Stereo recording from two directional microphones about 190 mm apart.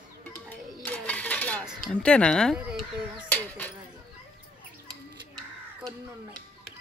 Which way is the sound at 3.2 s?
10° left (ahead or behind).